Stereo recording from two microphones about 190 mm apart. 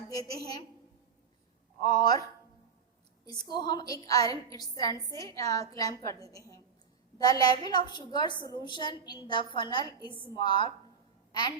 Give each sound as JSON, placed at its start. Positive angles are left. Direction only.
{"t": 0.1, "sound": "a woman's voice", "side_deg": 20}
{"t": 1.9, "sound": "a woman's voice", "side_deg": 20}
{"t": 3.5, "sound": "a woman's voice", "side_deg": 20}